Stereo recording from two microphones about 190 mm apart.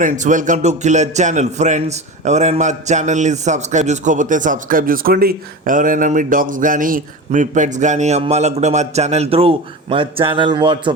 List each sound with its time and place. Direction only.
0.0 s speech: 40° right (ahead or behind); by 10.9 s 25° right (ahead or behind)